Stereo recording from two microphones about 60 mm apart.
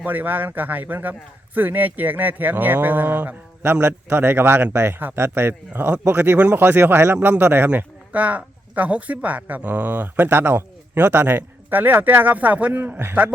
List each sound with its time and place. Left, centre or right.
0.0 s a man's voice: right
12.8 s a man's voice: right